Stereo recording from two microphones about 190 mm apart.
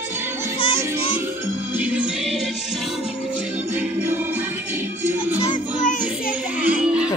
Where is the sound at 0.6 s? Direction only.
30° left (ahead or behind).